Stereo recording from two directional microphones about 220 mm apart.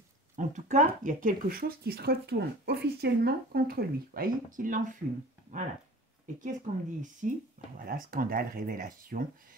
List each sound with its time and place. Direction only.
0.4 s speech: 35° right (ahead or behind)
6.4 s speech: 35° right (ahead or behind)